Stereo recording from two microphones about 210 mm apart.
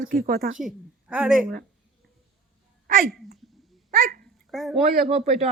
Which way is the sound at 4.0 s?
40° right (ahead or behind).